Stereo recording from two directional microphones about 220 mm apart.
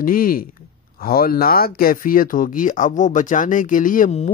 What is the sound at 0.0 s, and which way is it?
Speech, 40° left (ahead or behind).